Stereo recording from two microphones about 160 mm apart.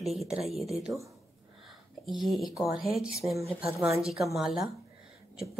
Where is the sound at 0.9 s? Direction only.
15° right (ahead or behind).